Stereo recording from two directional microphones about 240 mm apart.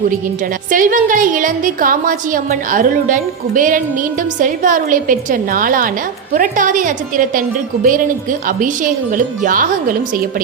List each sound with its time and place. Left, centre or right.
0.7 s a woman's voice: right